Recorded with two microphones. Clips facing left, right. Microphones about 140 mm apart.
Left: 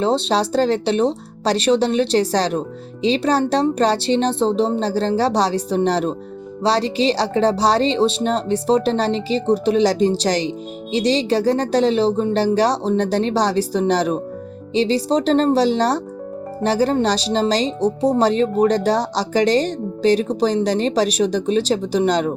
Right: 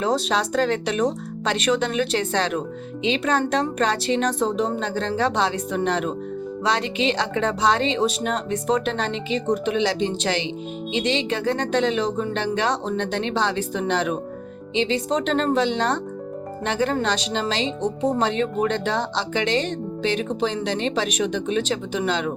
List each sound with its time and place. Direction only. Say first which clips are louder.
0.0 s speech: left 4 dB; 30° left (ahead or behind)